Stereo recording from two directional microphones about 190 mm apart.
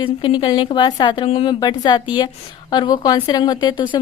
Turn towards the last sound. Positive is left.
turn(degrees=25)  # may be behind; listen again after turning